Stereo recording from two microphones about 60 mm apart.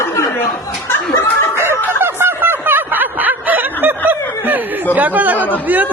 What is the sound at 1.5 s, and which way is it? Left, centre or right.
Snicker, right.